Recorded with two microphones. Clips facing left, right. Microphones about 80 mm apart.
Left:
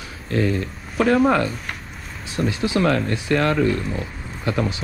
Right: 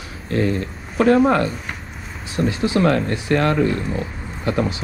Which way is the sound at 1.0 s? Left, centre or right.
Right.